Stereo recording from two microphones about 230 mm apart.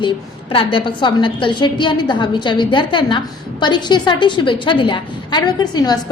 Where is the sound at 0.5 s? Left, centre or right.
Left.